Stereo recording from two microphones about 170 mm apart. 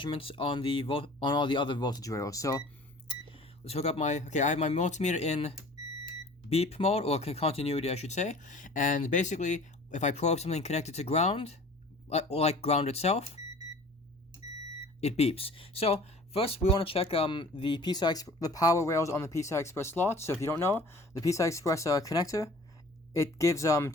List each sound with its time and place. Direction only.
0.0 s speech: 30° left (ahead or behind)
3.1 s speech: 30° left (ahead or behind)
15.0 s speech: 40° left (ahead or behind); by 23.9 s 20° left (ahead or behind)